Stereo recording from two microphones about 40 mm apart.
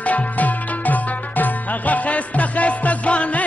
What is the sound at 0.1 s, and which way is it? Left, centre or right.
Tabla, left.